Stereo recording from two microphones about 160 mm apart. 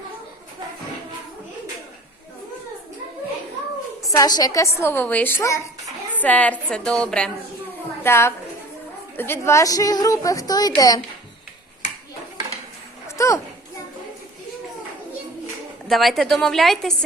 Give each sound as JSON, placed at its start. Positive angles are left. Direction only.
{"t": 4.1, "sound": "a woman's voice", "side_deg": 25}
{"t": 13.1, "sound": "a sound", "side_deg": 20}
{"t": 15.9, "sound": "a woman's voice", "side_deg": 0}